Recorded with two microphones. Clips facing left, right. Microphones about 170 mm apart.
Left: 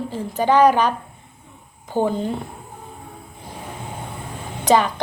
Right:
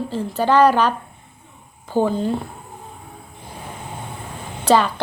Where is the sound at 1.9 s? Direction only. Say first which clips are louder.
Right 2 dB; 15° left (ahead or behind).